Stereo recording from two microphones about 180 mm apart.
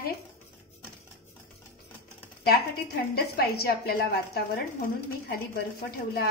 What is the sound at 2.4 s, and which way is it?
A woman's voice, 60° left (ahead or behind).